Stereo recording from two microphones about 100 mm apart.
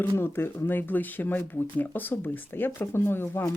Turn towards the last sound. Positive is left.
turn(degrees=25)  # may be behind; listen again after turning